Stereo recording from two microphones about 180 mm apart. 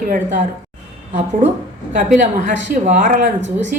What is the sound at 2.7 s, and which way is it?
Speech, 45° right (ahead or behind).